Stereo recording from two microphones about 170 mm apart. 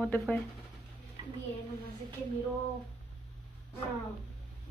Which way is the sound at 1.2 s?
30° right (ahead or behind).